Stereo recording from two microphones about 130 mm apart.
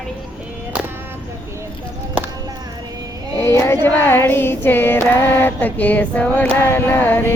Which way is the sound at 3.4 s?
20° left (ahead or behind).